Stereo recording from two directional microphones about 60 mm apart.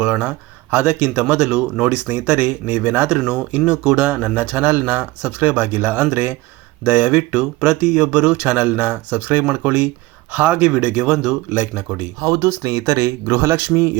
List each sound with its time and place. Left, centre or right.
0.0 s speech: right
8.4 s speech: right
11.5 s speech: right
12.2 s speech: right